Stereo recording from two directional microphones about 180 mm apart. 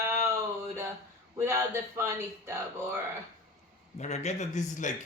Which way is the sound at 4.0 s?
40° left (ahead or behind).